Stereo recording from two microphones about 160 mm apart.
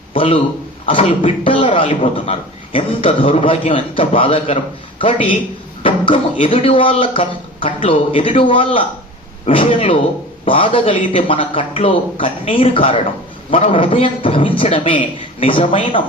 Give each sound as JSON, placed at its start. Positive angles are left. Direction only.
{"t": 0.1, "sound": "a sound", "side_deg": 35}
{"t": 0.9, "sound": "a man's voice", "side_deg": 35}
{"t": 6.4, "sound": "a man's voice", "side_deg": 35}